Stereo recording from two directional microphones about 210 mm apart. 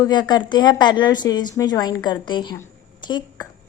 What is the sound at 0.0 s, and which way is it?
A woman's voice, 20° left (ahead or behind).